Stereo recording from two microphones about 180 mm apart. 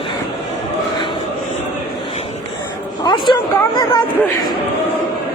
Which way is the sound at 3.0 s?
25° left (ahead or behind).